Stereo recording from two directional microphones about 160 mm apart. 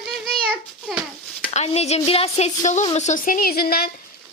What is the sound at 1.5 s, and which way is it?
A woman's voice, 40° left (ahead or behind).